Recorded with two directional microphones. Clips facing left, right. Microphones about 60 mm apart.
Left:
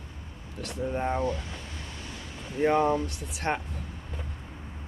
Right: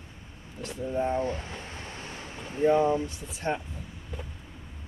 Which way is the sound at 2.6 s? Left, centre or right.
Left.